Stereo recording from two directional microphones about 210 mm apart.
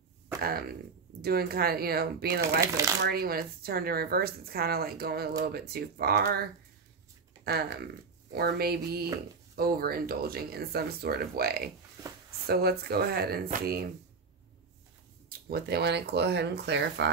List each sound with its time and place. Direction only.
0.4 s speech: 45° right (ahead or behind)
15.2 s speech: 50° right (ahead or behind)